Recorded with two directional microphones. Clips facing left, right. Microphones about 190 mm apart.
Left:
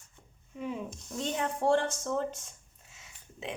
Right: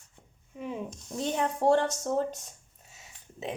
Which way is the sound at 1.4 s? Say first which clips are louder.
Right 3 dB; 40° right (ahead or behind).